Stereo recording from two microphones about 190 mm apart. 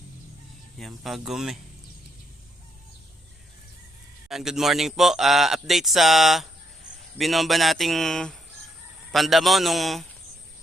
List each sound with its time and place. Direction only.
0.8 s a man's voice: centre (ahead or behind)
4.3 s a man's voice: centre (ahead or behind)